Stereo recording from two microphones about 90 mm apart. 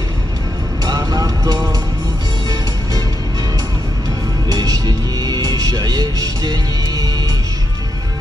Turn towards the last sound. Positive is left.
turn(degrees=-45)  # may be behind; listen again after turning